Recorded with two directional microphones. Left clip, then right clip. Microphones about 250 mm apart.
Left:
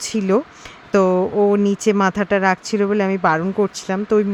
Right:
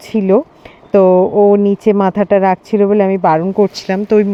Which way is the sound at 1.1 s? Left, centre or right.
Centre.